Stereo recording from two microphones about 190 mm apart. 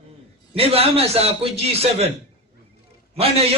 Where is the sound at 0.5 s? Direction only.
30° right (ahead or behind).